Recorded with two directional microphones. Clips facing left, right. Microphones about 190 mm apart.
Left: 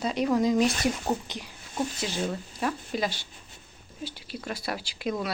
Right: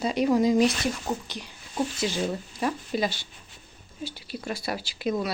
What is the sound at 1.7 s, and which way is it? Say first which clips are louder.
Speech: right 3 dB; 5° right (ahead or behind).